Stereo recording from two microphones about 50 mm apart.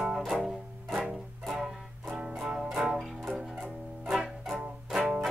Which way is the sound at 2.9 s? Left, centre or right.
Centre.